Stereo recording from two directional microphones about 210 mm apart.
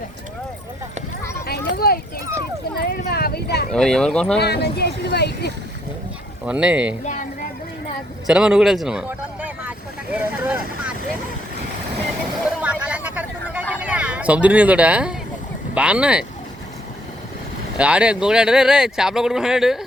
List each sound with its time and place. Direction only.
1.5 s clip-clop: 45° left (ahead or behind)
2.7 s a sound: 45° left (ahead or behind)
3.7 s speech: centre (ahead or behind)
4.4 s speech: 50° left (ahead or behind)
6.4 s speech: 5° right (ahead or behind)
8.3 s vehicle: 5° right (ahead or behind)
12.8 s a sound: 5° right (ahead or behind)
15.7 s speech: 5° right (ahead or behind)
17.7 s speech: 5° right (ahead or behind)